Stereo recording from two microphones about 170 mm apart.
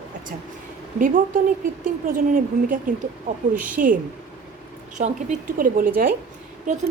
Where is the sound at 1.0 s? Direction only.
55° right (ahead or behind).